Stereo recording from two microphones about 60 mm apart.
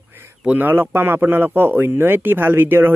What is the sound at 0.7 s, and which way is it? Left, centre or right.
Speech, right.